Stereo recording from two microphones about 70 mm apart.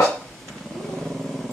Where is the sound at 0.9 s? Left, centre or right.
Centre.